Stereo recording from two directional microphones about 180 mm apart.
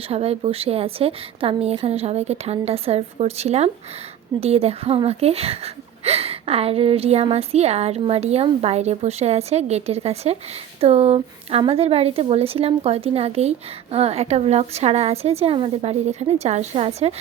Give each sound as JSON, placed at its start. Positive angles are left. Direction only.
{"t": 0.1, "sound": "a woman's voice", "side_deg": -35}